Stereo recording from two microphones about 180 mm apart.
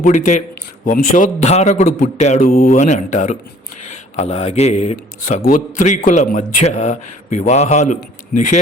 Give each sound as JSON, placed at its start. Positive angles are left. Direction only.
{"t": 0.0, "sound": "a man's voice", "side_deg": 45}